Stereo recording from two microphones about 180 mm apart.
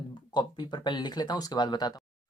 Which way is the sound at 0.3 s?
25° left (ahead or behind).